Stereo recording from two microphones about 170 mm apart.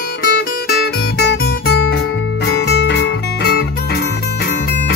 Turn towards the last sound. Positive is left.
turn(degrees=70)  # may be behind; listen again after turning